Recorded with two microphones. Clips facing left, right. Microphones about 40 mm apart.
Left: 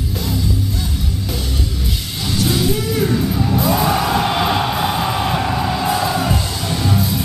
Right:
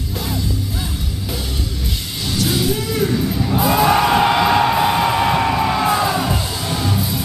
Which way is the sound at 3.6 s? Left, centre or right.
Right.